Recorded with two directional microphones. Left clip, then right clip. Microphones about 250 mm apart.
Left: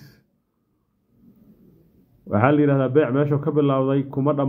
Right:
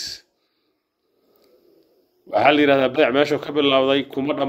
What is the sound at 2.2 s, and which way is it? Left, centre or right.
A man's voice, right.